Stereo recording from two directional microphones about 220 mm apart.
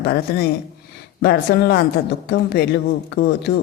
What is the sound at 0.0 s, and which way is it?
Speech, 45° left (ahead or behind).